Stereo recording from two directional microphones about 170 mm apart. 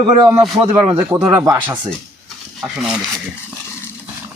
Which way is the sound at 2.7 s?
5° right (ahead or behind).